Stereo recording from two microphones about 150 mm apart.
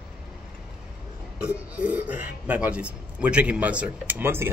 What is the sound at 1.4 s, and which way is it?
A man's voice, 10° right (ahead or behind).